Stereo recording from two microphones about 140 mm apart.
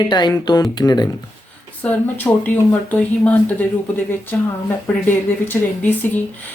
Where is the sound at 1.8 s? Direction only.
10° left (ahead or behind).